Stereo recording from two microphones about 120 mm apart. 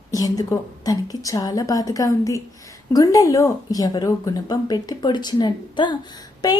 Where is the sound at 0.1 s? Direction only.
30° left (ahead or behind).